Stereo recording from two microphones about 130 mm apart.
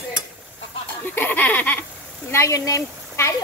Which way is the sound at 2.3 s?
25° left (ahead or behind).